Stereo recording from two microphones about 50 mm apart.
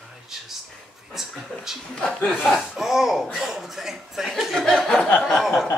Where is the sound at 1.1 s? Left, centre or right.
Centre.